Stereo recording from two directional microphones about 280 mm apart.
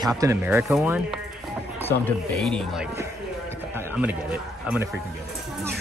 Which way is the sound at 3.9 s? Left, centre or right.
Centre.